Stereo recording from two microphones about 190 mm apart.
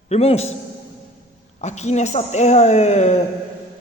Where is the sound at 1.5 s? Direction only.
35° left (ahead or behind).